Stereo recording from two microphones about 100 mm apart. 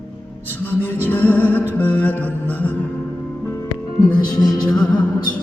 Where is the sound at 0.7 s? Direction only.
20° left (ahead or behind).